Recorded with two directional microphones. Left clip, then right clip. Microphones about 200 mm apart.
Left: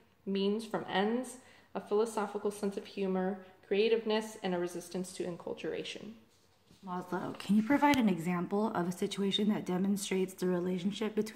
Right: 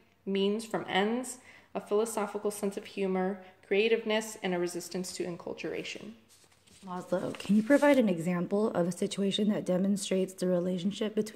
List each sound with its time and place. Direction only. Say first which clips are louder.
0.3 s speech: right 3 dB; 40° right (ahead or behind)